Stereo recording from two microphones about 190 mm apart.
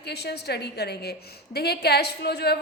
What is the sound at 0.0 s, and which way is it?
A woman's voice, 60° left (ahead or behind).